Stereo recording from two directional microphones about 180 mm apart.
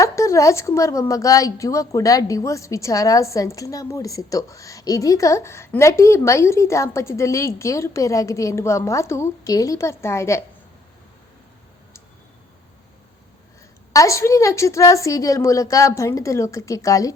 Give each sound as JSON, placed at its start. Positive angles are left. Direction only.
{"t": 0.0, "sound": "a woman's voice", "side_deg": 15}
{"t": 13.9, "sound": "a woman's voice", "side_deg": 15}